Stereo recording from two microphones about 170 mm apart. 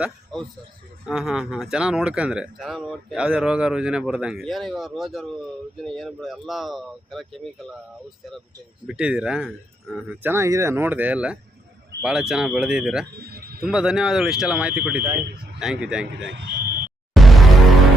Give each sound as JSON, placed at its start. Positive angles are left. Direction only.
{"t": 0.0, "sound": "a man's voice", "side_deg": 5}
{"t": 8.9, "sound": "speech", "side_deg": -5}
{"t": 10.2, "sound": "speech", "side_deg": -15}
{"t": 13.1, "sound": "a sound", "side_deg": -65}
{"t": 13.7, "sound": "speech", "side_deg": -5}
{"t": 16.0, "sound": "speech", "side_deg": -75}
{"t": 17.2, "sound": "music", "side_deg": 0}